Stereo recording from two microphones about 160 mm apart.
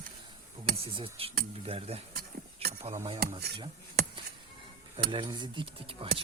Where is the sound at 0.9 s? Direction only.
35° right (ahead or behind).